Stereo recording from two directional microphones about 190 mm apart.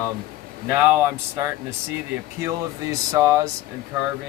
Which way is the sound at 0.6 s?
10° right (ahead or behind).